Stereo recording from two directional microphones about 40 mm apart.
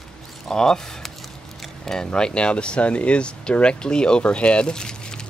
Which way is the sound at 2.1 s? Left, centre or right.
Left.